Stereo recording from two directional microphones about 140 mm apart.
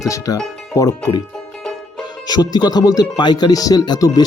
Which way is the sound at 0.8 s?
25° left (ahead or behind).